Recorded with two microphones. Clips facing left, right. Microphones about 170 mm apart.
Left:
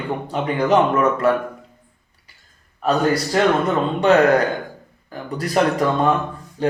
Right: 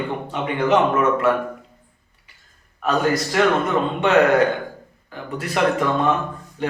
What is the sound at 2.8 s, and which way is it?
Speech, 35° left (ahead or behind).